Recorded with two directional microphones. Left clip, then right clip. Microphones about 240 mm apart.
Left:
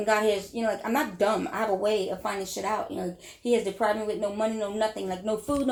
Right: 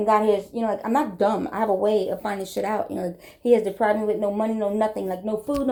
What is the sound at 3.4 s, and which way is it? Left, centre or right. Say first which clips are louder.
Speech: right 6 dB; right.